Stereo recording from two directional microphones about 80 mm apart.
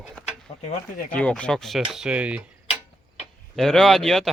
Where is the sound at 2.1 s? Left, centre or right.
Centre.